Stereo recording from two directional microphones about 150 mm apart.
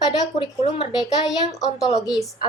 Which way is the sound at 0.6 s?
35° left (ahead or behind).